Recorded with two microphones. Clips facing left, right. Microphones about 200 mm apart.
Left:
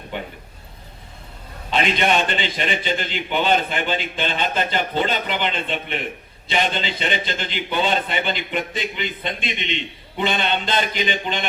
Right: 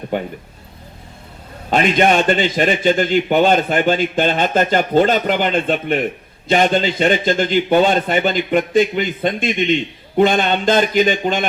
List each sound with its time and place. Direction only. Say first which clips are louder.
0.1 s a man's voice: right 8 dB; 45° right (ahead or behind)
1.7 s a man's voice: right 6 dB; 45° right (ahead or behind)